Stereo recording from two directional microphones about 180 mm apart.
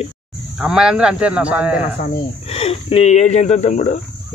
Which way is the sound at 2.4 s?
30° left (ahead or behind).